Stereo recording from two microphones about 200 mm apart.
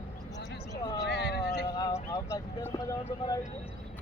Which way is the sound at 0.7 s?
20° left (ahead or behind).